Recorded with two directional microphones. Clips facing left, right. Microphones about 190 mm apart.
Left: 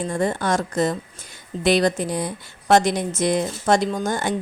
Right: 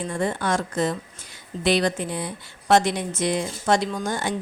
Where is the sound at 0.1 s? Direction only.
40° left (ahead or behind).